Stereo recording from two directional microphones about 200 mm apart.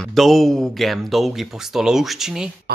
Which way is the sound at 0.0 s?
Centre (ahead or behind).